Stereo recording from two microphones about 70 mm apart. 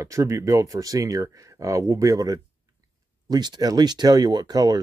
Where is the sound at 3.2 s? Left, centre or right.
Right.